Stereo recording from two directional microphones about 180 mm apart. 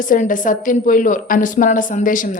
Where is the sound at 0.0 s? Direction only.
50° left (ahead or behind).